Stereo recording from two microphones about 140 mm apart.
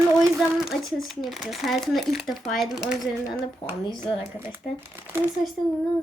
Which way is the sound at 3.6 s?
45° left (ahead or behind).